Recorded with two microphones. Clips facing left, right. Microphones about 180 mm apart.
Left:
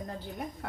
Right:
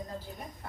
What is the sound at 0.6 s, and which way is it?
Speech, 65° left (ahead or behind).